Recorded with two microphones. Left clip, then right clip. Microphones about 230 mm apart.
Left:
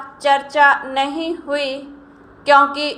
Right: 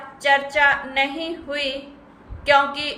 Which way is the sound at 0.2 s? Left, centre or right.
Centre.